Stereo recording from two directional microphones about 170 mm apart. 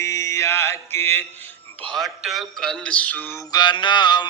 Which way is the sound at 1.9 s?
Centre (ahead or behind).